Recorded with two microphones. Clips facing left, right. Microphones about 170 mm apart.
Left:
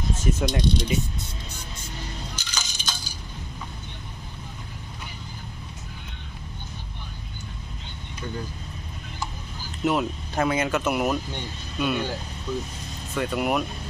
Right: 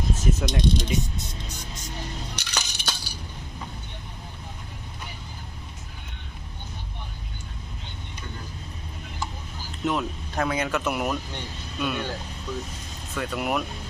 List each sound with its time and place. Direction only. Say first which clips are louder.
0.3 s speech: left 1 dB; centre (ahead or behind)
2.3 s a sound: right 2 dB; 65° right (ahead or behind)
9.8 s speech: left 3 dB; 5° left (ahead or behind)
13.1 s speech: left 3 dB; centre (ahead or behind)